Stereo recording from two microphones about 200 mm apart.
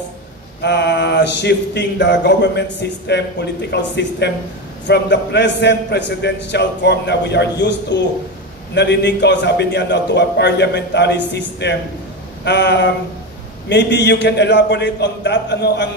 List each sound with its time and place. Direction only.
0.6 s speech: 60° left (ahead or behind)